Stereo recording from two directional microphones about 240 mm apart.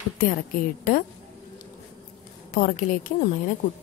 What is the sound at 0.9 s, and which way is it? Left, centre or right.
Speech, left.